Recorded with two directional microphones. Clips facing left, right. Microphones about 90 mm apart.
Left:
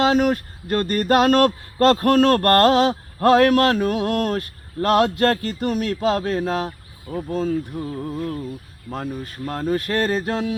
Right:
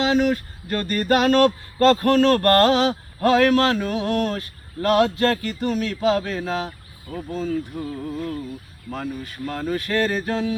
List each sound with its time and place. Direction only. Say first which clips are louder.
0.0 s a sound: left 2 dB; 50° left (ahead or behind)
7.1 s speech: left 4 dB; 40° left (ahead or behind)
8.9 s speech: left 1 dB; 35° left (ahead or behind)